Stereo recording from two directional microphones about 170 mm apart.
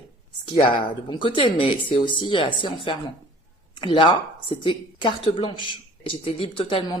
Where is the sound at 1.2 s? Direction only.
30° left (ahead or behind).